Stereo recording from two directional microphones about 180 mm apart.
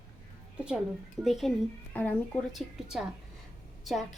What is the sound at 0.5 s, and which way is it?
A woman's voice, 5° right (ahead or behind).